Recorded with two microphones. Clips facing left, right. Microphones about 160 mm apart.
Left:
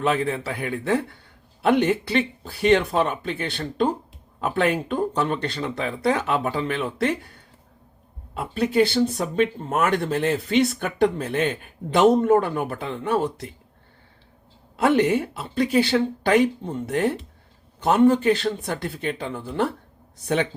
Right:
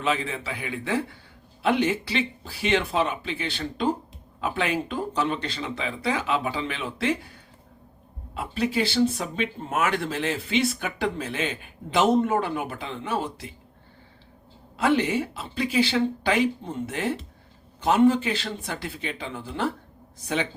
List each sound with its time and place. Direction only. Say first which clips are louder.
0.0 s speech: left 4 dB; 50° left (ahead or behind)
8.4 s speech: left 5 dB; 55° left (ahead or behind)
14.8 s speech: left 4 dB; 55° left (ahead or behind)
17.8 s speech: left 3 dB; 50° left (ahead or behind)